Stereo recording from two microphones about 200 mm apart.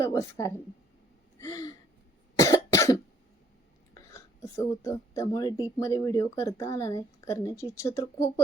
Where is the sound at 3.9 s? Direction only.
15° left (ahead or behind).